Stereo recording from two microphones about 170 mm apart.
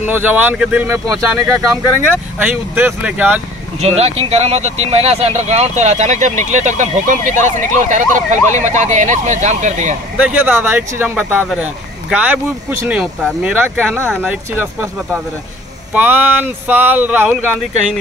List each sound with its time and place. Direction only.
0.0 s speech: 10° right (ahead or behind)
3.8 s speech: 40° right (ahead or behind)
10.1 s speech: 10° right (ahead or behind)